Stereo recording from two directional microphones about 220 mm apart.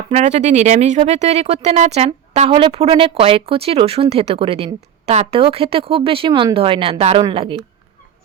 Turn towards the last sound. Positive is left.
turn(degrees=-25)  # may be behind; listen again after turning